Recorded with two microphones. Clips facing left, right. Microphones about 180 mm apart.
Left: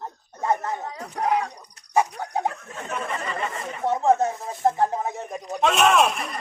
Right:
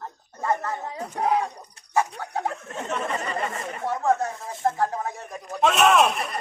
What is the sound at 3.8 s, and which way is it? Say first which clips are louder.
Speech: left 4 dB; 20° left (ahead or behind).